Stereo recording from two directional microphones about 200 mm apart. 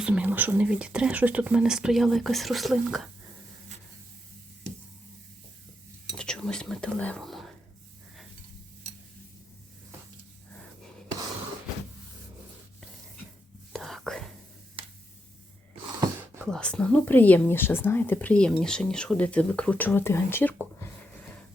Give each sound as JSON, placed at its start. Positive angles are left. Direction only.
{"t": 0.0, "sound": "speech", "side_deg": -5}
{"t": 6.1, "sound": "whispering", "side_deg": 5}
{"t": 13.7, "sound": "whispering", "side_deg": 0}
{"t": 16.5, "sound": "speech", "side_deg": 5}